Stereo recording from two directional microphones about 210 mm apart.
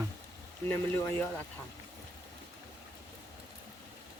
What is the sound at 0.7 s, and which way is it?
Speech, 10° left (ahead or behind).